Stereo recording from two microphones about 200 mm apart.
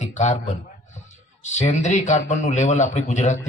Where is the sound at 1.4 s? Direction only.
35° left (ahead or behind).